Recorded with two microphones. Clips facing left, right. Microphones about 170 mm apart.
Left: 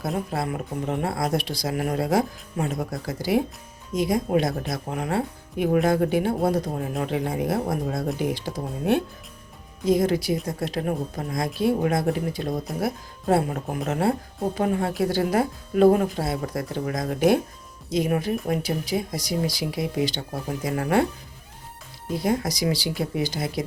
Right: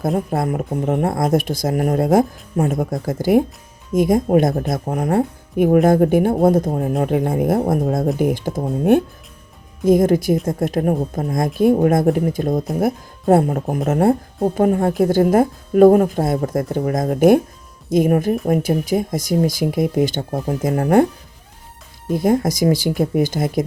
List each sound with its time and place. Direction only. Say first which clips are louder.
0.0 s speech: right 7 dB; 50° right (ahead or behind)
22.1 s speech: right 8 dB; 50° right (ahead or behind)